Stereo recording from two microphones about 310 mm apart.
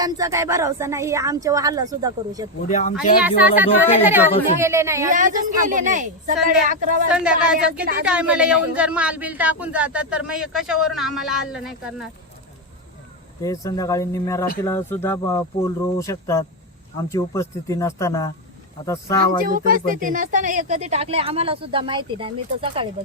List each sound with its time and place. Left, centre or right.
0.0 s speech: centre
2.6 s speech: left
3.2 s a man's voice: centre
5.0 s speech: right
7.1 s a man's voice: centre
13.4 s speech: centre
19.5 s speech: right